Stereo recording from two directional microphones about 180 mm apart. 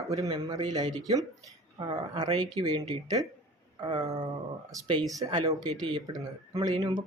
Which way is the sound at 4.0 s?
20° right (ahead or behind).